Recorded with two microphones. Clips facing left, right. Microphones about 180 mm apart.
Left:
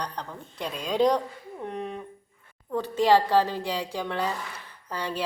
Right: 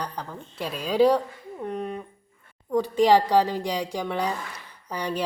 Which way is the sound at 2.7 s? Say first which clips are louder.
Right 2 dB; 15° right (ahead or behind).